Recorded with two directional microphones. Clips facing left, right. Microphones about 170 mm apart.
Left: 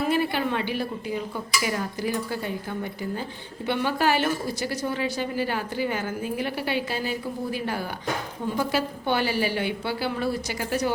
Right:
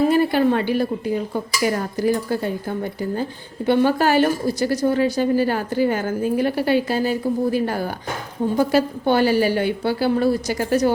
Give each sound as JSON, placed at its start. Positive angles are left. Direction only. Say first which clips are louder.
{"t": 0.0, "sound": "a woman's voice", "louder": "right 8 dB", "side_deg": -40}